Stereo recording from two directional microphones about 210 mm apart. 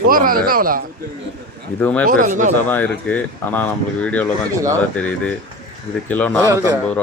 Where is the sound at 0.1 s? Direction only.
40° right (ahead or behind).